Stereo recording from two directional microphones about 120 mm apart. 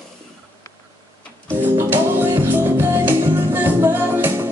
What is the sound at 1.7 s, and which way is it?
Music, 20° right (ahead or behind).